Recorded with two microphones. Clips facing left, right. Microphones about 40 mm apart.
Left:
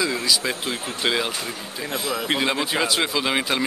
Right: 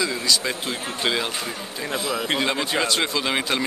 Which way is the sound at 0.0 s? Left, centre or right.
Centre.